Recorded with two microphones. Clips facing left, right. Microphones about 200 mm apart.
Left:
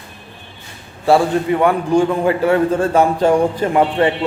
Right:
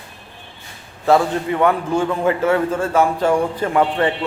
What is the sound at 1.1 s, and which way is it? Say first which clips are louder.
A man's voice: left 2 dB; 10° left (ahead or behind).